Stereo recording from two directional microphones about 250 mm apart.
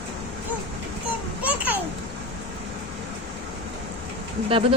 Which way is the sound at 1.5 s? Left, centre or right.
Centre.